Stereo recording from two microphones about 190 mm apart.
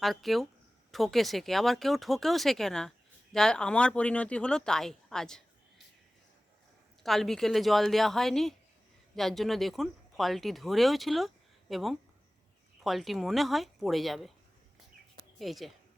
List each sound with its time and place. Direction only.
0.0 s speech: centre (ahead or behind)
7.0 s speech: centre (ahead or behind)
15.4 s speech: centre (ahead or behind)